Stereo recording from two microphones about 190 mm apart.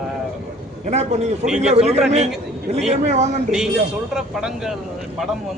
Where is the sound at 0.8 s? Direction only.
35° right (ahead or behind).